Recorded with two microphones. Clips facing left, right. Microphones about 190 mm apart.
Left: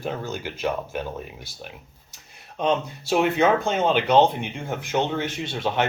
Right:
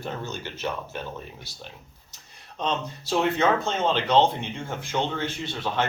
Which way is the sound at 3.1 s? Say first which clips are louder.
Left 3 dB; 15° left (ahead or behind).